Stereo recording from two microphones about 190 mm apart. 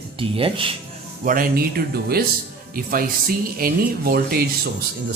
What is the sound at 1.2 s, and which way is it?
Speech, 45° right (ahead or behind).